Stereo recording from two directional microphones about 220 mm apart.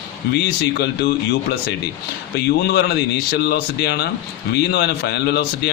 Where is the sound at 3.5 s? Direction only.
45° left (ahead or behind).